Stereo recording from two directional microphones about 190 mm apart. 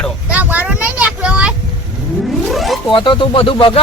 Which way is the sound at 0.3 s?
10° right (ahead or behind).